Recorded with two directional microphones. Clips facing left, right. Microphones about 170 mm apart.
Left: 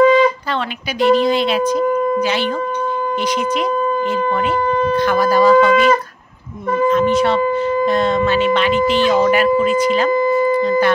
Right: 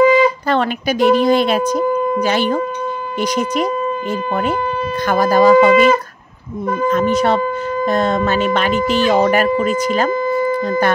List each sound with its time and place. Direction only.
0.0 s wind instrument: 10° right (ahead or behind)
0.5 s speech: 45° right (ahead or behind)
5.0 s speech: 45° right (ahead or behind)
5.6 s a sound: 10° right (ahead or behind)
6.9 s speech: 40° right (ahead or behind)